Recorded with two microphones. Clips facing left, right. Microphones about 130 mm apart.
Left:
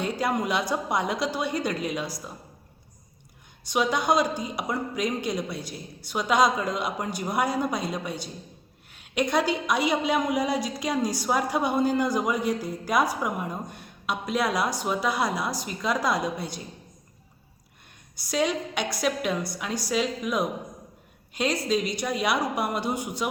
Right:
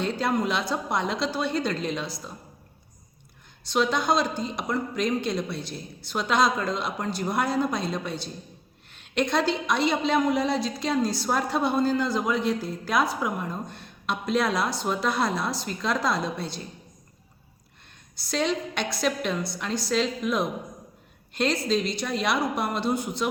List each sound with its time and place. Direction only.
0.0 s a woman's voice: 10° left (ahead or behind)
3.7 s a woman's voice: 10° left (ahead or behind)
18.2 s a woman's voice: 10° left (ahead or behind)